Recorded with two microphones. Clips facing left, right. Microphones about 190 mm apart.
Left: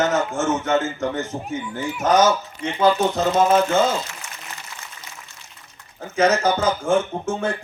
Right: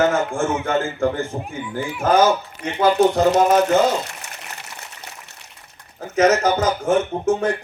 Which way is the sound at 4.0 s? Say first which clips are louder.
Right 2 dB; 65° right (ahead or behind).